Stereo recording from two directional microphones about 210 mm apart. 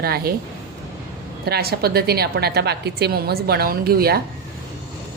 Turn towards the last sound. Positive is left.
turn(degrees=-45)  # may be behind; listen again after turning